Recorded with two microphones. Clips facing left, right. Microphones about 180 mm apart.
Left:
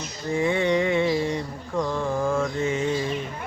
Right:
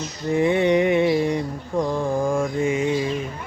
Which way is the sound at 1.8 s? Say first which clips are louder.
Right 3 dB; 15° right (ahead or behind).